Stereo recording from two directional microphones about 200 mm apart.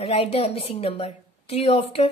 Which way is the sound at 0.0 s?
30° left (ahead or behind).